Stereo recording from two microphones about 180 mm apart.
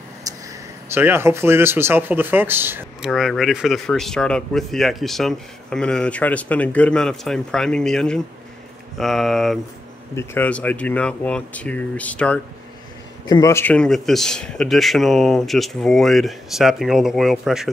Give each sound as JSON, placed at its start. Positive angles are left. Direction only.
{"t": 0.3, "sound": "a sound", "side_deg": -20}
{"t": 0.8, "sound": "speech", "side_deg": -10}
{"t": 3.1, "sound": "speech", "side_deg": 0}